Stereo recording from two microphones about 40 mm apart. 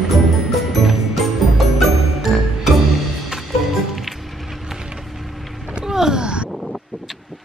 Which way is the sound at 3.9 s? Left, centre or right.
Centre.